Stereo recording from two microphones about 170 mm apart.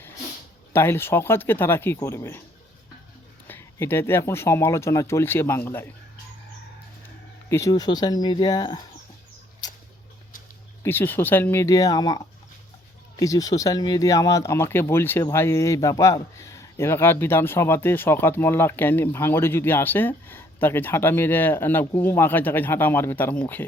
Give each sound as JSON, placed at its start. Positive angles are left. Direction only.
{"t": 0.7, "sound": "speech", "side_deg": 15}
{"t": 3.4, "sound": "speech", "side_deg": 15}
{"t": 7.5, "sound": "speech", "side_deg": 20}
{"t": 10.8, "sound": "speech", "side_deg": 10}